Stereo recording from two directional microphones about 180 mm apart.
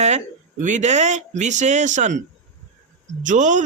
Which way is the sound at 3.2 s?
45° right (ahead or behind).